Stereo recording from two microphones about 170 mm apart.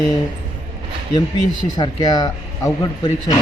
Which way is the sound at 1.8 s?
25° left (ahead or behind).